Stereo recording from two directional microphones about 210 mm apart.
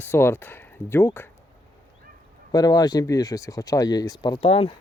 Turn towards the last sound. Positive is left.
turn(degrees=25)  # may be behind; listen again after turning